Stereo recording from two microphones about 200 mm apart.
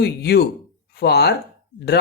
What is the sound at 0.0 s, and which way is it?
Speech, 55° left (ahead or behind).